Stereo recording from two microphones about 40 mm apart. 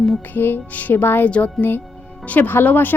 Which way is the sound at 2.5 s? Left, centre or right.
Left.